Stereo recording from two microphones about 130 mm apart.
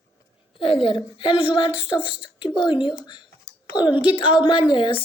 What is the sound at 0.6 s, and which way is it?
Speech, 45° left (ahead or behind).